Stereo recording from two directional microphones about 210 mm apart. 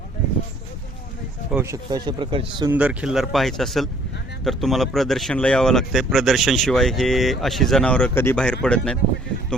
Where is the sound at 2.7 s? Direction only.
5° right (ahead or behind).